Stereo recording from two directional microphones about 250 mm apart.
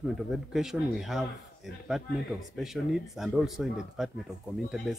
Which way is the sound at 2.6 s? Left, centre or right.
Centre.